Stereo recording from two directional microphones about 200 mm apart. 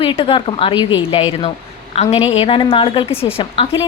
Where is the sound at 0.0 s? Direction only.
25° left (ahead or behind).